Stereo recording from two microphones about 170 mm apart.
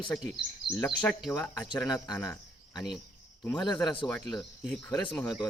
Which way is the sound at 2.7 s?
25° left (ahead or behind).